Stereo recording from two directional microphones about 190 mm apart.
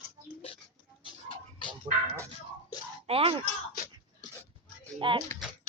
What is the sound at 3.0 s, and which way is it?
Speech, 30° right (ahead or behind).